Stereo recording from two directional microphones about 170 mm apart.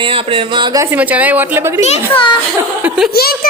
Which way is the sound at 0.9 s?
10° right (ahead or behind).